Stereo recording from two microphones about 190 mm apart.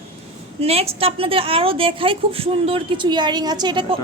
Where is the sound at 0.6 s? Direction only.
30° right (ahead or behind).